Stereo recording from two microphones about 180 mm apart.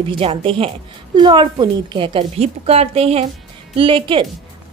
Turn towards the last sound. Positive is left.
turn(degrees=-30)  # may be behind; listen again after turning